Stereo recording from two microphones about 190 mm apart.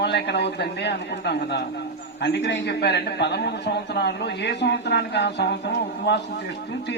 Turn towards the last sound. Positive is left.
turn(degrees=65)  # may be behind; listen again after turning